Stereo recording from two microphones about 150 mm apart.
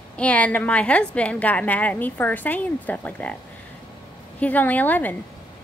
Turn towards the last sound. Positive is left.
turn(degrees=10)  # may be behind; listen again after turning